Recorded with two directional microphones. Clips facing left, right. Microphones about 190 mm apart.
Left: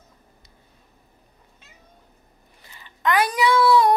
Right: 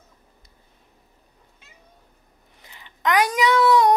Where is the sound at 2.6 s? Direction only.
15° right (ahead or behind).